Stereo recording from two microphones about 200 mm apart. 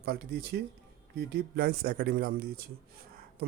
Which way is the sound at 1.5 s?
50° right (ahead or behind).